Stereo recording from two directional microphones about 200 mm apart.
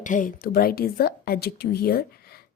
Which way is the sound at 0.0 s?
40° left (ahead or behind).